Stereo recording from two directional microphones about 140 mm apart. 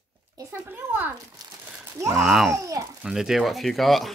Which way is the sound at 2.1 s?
Centre (ahead or behind).